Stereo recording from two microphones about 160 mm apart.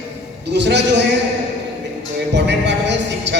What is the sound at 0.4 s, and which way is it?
Music, 90° right.